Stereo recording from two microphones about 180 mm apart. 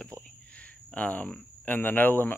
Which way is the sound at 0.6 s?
5° left (ahead or behind).